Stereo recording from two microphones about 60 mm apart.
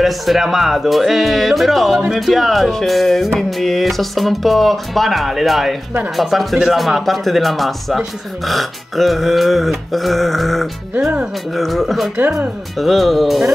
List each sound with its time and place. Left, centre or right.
0.0 s speech: centre